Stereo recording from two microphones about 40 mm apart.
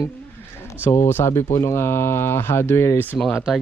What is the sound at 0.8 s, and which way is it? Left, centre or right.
Speech, left.